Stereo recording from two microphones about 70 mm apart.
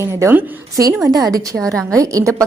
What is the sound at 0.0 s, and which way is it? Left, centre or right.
Speech, right.